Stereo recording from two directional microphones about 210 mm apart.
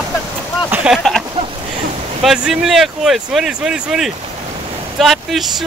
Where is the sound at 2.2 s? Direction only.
Centre (ahead or behind).